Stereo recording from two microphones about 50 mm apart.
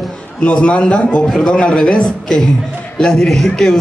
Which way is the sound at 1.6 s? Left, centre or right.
Left.